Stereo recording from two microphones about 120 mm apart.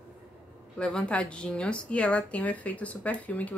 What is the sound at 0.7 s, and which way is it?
A woman's voice, 10° left (ahead or behind).